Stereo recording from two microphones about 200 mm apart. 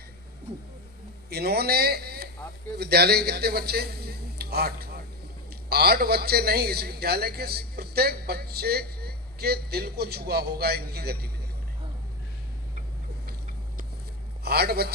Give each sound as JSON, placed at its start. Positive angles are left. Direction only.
{"t": 1.3, "sound": "a man's voice", "side_deg": -50}
{"t": 14.4, "sound": "a man's voice", "side_deg": -50}